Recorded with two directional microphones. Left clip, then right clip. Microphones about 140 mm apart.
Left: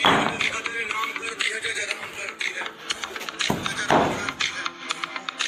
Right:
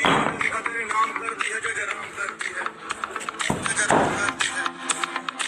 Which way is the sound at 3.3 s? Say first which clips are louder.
Left 1 dB; 90° right.